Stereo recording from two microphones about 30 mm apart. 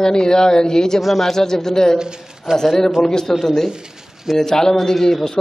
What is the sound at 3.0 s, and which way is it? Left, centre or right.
Speech, centre.